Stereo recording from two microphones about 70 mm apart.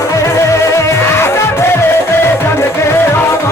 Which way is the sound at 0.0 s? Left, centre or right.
Left.